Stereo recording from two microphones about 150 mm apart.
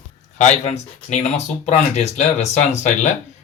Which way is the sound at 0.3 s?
50° left (ahead or behind).